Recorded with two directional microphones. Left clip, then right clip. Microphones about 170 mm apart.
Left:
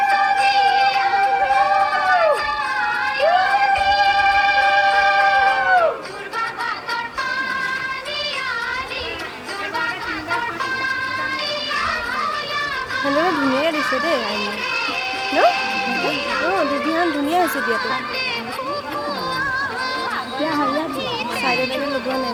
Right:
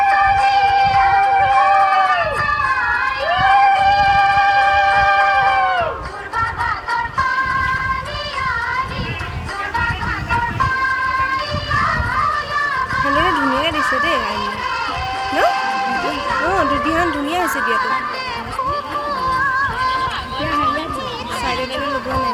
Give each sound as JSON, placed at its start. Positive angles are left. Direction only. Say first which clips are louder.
{"t": 0.1, "sound": "a sound", "louder": "right 3 dB", "side_deg": 25}
{"t": 6.9, "sound": "music", "louder": "right 7 dB", "side_deg": 25}
{"t": 10.3, "sound": "music", "louder": "right 5 dB", "side_deg": 25}
{"t": 11.7, "sound": "children playing", "louder": "right 7 dB", "side_deg": 25}
{"t": 13.7, "sound": "a sound", "louder": "right 3 dB", "side_deg": 25}
{"t": 15.4, "sound": "music", "louder": "right 1 dB", "side_deg": 25}
{"t": 16.6, "sound": "a sound", "louder": "right 3 dB", "side_deg": 25}
{"t": 19.3, "sound": "music", "louder": "right 6 dB", "side_deg": 25}
{"t": 20.4, "sound": "chatter", "louder": "right 3 dB", "side_deg": 25}